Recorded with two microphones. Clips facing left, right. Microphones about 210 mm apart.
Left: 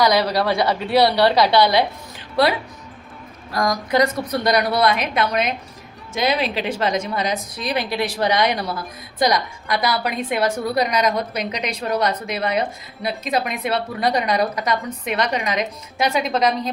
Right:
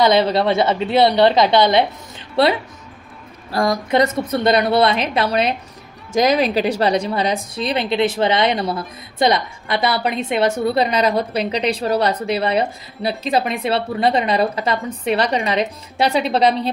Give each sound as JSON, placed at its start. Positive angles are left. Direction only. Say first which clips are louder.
{"t": 0.0, "sound": "a woman's voice", "louder": "right 3 dB", "side_deg": -25}